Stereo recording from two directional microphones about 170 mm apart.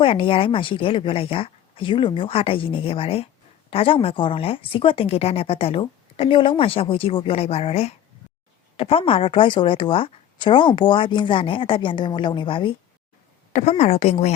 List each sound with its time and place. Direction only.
0.0 s a woman's voice: 30° left (ahead or behind)
13.5 s speech: 40° left (ahead or behind)